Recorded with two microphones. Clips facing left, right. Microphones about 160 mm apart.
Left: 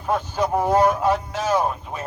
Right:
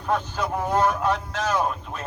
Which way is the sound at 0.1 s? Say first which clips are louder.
Left 4 dB; 15° left (ahead or behind).